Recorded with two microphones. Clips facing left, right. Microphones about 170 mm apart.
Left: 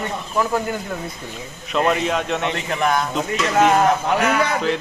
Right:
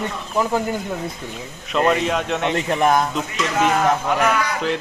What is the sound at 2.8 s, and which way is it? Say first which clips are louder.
Speech: right 3 dB; 40° right (ahead or behind).